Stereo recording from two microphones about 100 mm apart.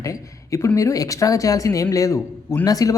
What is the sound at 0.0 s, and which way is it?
Speech, 30° left (ahead or behind).